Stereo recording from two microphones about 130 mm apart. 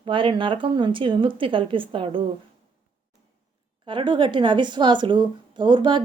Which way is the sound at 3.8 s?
40° right (ahead or behind).